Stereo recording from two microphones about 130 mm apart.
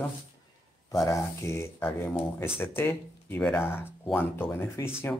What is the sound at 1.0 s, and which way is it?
Speech, 25° left (ahead or behind).